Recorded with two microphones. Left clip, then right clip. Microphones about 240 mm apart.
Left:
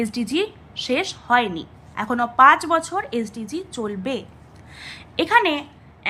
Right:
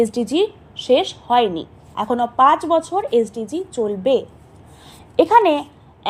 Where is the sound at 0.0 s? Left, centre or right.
Centre.